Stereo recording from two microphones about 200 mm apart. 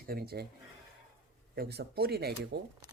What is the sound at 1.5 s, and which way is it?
Speech, 55° right (ahead or behind).